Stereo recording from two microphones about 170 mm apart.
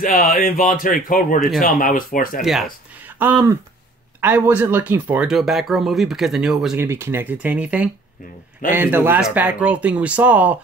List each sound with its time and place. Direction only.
0.0 s speech: 55° left (ahead or behind)
3.2 s speech: 10° right (ahead or behind)
6.8 s speech: 15° right (ahead or behind)